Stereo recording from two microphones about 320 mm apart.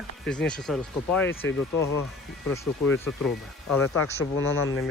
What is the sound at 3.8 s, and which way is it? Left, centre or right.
Speech, left.